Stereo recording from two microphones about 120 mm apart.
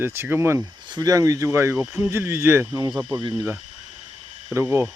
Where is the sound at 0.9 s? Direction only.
30° right (ahead or behind).